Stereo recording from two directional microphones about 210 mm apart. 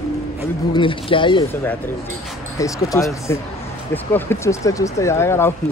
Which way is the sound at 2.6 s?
15° left (ahead or behind).